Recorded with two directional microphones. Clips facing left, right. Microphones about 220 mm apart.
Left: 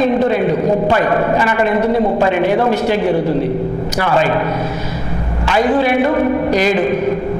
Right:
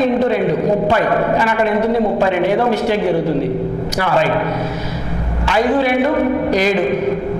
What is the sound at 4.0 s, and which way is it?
A man's voice, 15° left (ahead or behind).